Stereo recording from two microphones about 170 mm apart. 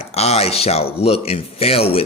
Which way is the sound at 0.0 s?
40° left (ahead or behind).